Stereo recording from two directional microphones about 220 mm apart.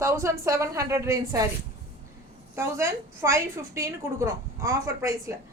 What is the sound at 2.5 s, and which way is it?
A woman's voice, 10° right (ahead or behind).